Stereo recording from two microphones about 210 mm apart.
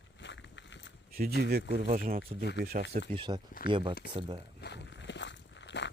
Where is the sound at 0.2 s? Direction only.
60° left (ahead or behind).